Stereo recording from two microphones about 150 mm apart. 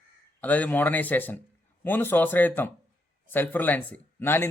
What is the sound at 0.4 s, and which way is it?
Speech, 10° left (ahead or behind).